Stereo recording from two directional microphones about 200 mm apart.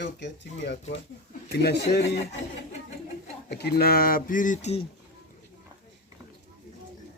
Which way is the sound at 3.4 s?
50° left (ahead or behind).